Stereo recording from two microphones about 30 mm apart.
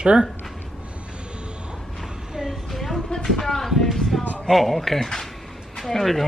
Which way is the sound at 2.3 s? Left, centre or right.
Centre.